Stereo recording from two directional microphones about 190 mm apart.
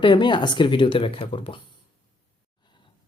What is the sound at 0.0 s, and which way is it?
Speech, 25° left (ahead or behind).